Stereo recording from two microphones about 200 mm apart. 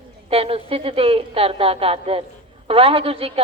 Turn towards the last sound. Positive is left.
turn(degrees=-30)  # may be behind; listen again after turning